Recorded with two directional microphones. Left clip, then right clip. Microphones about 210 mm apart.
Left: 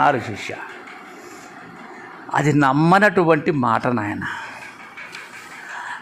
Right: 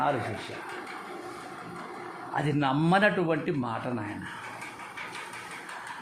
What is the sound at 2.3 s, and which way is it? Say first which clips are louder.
A man's voice: left 11 dB; 25° left (ahead or behind).